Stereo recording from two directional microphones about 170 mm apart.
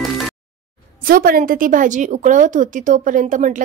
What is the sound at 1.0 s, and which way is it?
A woman's voice, 60° right (ahead or behind).